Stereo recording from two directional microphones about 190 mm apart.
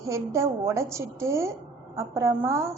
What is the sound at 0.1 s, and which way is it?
A woman's voice, 15° right (ahead or behind).